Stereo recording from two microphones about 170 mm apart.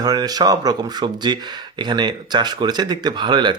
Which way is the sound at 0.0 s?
25° right (ahead or behind).